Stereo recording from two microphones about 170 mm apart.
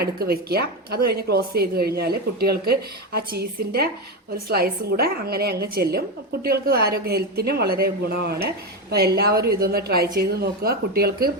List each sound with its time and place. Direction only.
0.0 s a woman's voice: 65° right (ahead or behind)